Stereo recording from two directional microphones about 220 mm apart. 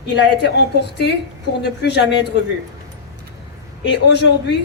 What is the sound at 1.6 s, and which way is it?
Speech, 50° left (ahead or behind).